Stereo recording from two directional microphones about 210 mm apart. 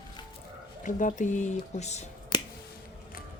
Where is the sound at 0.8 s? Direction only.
35° left (ahead or behind).